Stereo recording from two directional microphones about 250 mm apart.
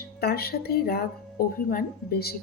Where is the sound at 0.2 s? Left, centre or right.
Left.